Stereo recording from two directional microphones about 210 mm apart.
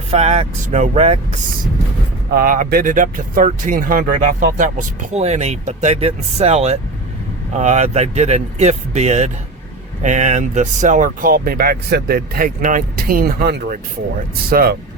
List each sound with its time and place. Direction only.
0.1 s speech: 30° right (ahead or behind)
2.3 s speech: 40° right (ahead or behind)